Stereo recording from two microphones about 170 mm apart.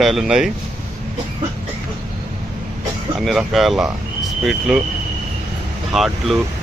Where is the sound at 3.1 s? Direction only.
Centre (ahead or behind).